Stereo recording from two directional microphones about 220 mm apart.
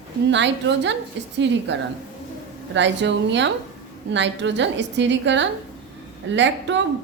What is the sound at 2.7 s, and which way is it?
A woman's voice, 55° right (ahead or behind).